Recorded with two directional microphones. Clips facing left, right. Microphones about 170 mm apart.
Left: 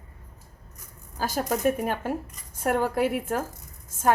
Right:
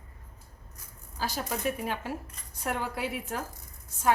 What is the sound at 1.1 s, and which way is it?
A woman's voice, 45° left (ahead or behind).